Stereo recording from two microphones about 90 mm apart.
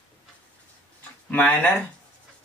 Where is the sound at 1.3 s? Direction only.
20° left (ahead or behind).